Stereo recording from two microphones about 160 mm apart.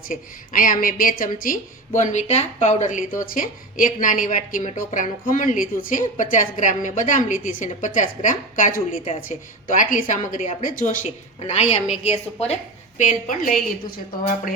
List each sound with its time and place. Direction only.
0.1 s a woman's voice: 55° left (ahead or behind); by 12.5 s 40° left (ahead or behind)
13.0 s a woman's voice: 55° left (ahead or behind)